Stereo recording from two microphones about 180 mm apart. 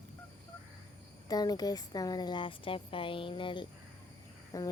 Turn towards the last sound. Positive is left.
turn(degrees=20)  # may be behind; listen again after turning